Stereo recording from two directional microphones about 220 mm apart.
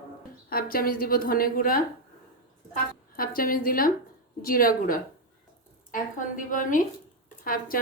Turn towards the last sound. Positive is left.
turn(degrees=40)  # may be behind; listen again after turning